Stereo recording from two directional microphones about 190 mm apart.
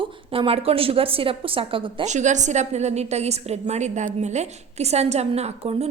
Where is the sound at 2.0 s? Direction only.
40° right (ahead or behind).